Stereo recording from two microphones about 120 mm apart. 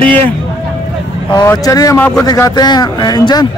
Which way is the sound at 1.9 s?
10° left (ahead or behind).